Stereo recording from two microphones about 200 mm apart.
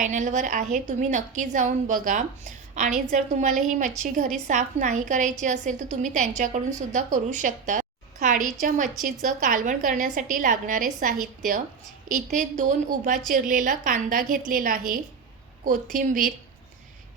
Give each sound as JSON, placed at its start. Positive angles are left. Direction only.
{"t": 0.0, "sound": "a woman's voice", "side_deg": -35}